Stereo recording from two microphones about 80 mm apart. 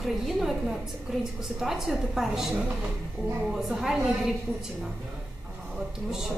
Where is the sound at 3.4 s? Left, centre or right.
Centre.